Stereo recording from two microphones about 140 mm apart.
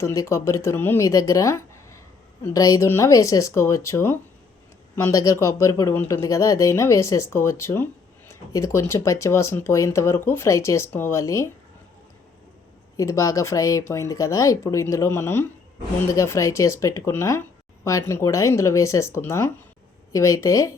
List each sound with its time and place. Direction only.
0.0 s speech: 20° left (ahead or behind)
13.0 s speech: 20° left (ahead or behind)